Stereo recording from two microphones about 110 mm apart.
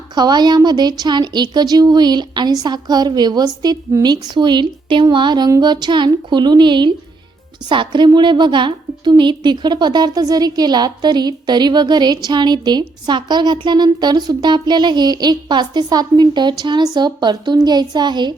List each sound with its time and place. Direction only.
0.1 s a woman's voice: 40° right (ahead or behind)